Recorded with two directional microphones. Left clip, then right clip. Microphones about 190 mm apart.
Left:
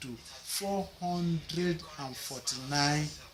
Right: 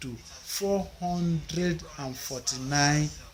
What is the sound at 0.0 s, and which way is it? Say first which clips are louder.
Speech: right 3 dB; 50° right (ahead or behind).